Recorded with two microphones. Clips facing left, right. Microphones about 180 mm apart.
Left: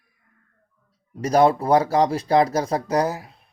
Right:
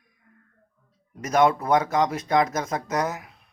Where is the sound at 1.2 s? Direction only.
35° left (ahead or behind).